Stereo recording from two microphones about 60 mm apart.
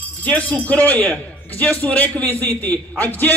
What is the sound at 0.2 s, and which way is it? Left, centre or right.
A man's voice, left.